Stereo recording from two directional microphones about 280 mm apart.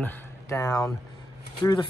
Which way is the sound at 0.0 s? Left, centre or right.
Centre.